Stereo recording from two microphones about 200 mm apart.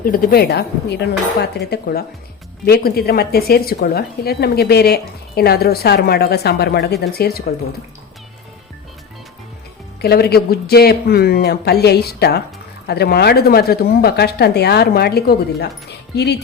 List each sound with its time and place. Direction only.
0.0 s a woman's voice: 45° left (ahead or behind)
10.0 s a woman's voice: 50° left (ahead or behind)